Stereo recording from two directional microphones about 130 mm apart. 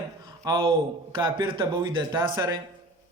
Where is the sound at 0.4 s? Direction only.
35° right (ahead or behind).